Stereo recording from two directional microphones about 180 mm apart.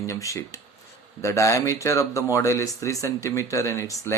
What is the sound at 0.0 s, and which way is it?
Speech, 20° left (ahead or behind).